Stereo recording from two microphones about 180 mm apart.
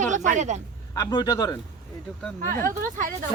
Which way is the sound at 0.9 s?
20° left (ahead or behind).